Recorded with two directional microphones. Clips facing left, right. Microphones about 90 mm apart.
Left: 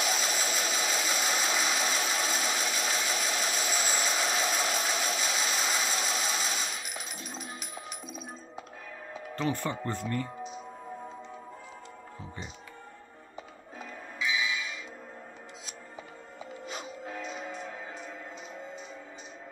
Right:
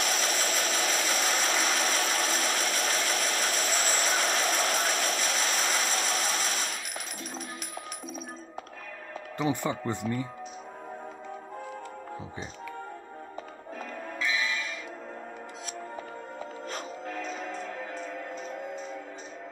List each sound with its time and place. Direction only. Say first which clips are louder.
0.0 s engine: right 1 dB; 5° left (ahead or behind)
4.2 s a sound: right 2 dB; 5° left (ahead or behind)
9.4 s speech: right 3 dB; 15° right (ahead or behind)
10.0 s speech: right 1 dB; 5° right (ahead or behind)
13.7 s music: right 3 dB; 5° left (ahead or behind)
17.2 s music: right 3 dB; 5° left (ahead or behind)